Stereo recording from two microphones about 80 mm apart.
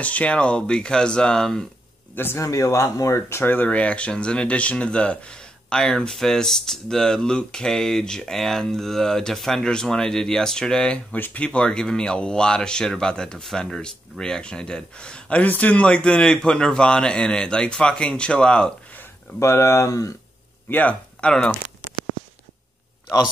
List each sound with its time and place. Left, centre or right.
0.0 s speech: centre
2.1 s speech: left
2.4 s speech: left; by 18.7 s centre
19.4 s speech: left
20.7 s speech: centre